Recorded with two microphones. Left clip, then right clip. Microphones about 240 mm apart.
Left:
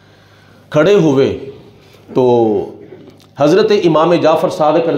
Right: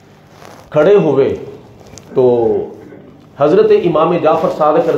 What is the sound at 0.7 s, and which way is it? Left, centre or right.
Speech, left.